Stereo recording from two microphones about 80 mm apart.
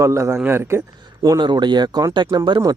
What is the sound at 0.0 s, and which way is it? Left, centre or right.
Speech, right.